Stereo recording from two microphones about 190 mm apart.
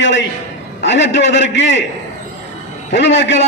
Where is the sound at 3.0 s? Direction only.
65° left (ahead or behind).